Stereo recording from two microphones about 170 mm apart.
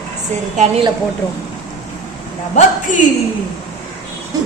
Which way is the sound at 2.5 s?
50° left (ahead or behind).